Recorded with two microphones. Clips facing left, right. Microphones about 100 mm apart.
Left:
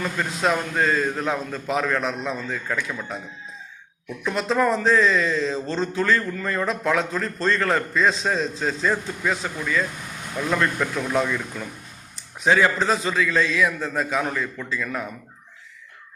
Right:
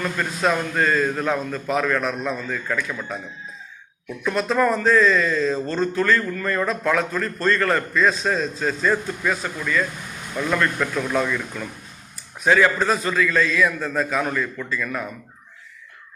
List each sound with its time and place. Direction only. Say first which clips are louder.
0.0 s a man's voice: right 1 dB; 15° left (ahead or behind)
4.2 s a man's voice: right 1 dB; 20° left (ahead or behind)
12.5 s a man's voice: right 1 dB; 25° left (ahead or behind)